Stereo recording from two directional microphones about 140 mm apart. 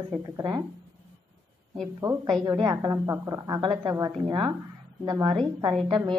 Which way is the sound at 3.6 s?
30° right (ahead or behind).